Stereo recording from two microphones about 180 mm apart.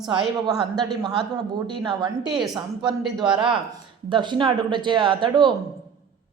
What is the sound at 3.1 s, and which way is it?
A woman's voice, 25° right (ahead or behind).